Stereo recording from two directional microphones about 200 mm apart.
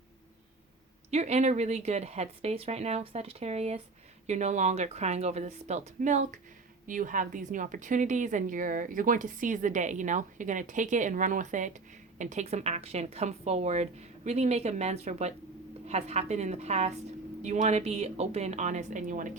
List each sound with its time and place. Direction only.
1.1 s a woman's voice: 35° right (ahead or behind)